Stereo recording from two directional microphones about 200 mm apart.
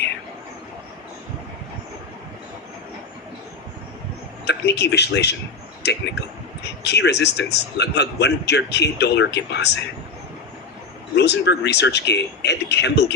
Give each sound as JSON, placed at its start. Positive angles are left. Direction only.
{"t": 4.4, "sound": "a man's voice", "side_deg": 55}
{"t": 11.1, "sound": "a man's voice", "side_deg": 55}